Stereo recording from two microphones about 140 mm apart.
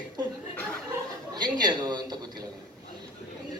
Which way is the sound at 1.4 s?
30° right (ahead or behind).